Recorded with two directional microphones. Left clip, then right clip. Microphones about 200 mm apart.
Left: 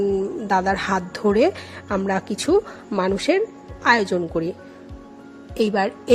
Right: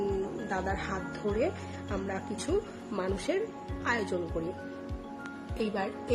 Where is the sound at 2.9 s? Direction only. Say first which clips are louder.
Left 12 dB; 45° left (ahead or behind).